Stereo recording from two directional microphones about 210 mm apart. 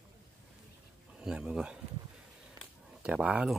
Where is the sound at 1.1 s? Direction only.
5° right (ahead or behind).